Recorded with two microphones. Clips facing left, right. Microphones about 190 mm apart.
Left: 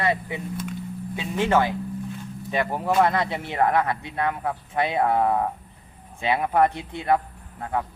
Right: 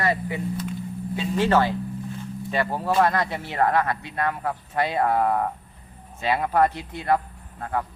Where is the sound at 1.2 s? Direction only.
10° left (ahead or behind).